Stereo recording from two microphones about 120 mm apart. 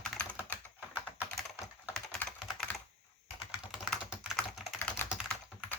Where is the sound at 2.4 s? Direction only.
5° right (ahead or behind).